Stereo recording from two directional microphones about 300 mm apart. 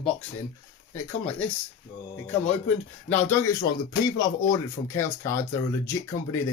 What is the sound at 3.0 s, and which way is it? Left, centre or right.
Speech, centre.